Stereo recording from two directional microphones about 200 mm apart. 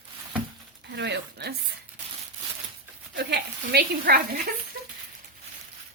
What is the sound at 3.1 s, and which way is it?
Speech, 50° right (ahead or behind).